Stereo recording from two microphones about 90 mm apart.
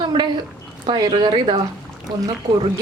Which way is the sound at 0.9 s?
55° right (ahead or behind).